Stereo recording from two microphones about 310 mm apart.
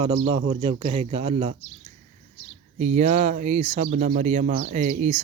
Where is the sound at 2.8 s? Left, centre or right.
Right.